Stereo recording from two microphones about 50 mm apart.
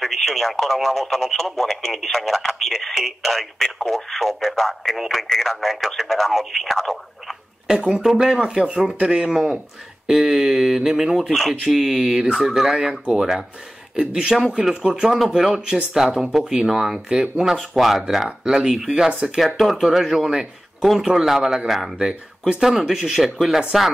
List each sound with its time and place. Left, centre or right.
0.0 s speech: centre
7.6 s speech: centre
19.4 s speech: centre